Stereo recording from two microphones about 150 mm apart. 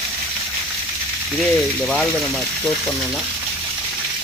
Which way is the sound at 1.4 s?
5° left (ahead or behind).